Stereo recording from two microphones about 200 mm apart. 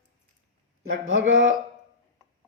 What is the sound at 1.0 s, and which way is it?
Speech, 75° right (ahead or behind).